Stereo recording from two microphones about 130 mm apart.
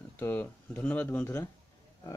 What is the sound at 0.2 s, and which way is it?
Speech, 15° left (ahead or behind).